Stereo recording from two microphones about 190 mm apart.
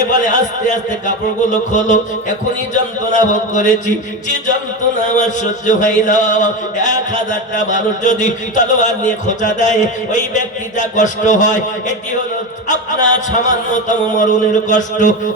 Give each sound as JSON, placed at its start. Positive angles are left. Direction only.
{"t": 0.1, "sound": "speech", "side_deg": 40}
{"t": 3.1, "sound": "speech", "side_deg": 40}